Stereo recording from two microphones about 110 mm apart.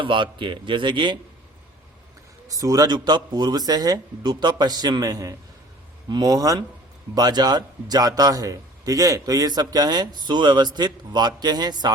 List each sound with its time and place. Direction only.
0.0 s a man's voice: 50° right (ahead or behind)
2.5 s a man's voice: 30° right (ahead or behind)